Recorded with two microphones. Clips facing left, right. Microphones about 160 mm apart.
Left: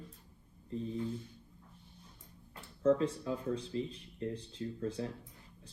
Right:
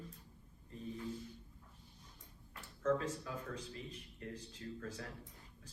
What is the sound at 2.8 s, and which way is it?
Speech, 30° left (ahead or behind).